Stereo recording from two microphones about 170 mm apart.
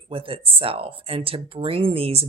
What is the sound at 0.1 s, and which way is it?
Speech, 30° right (ahead or behind).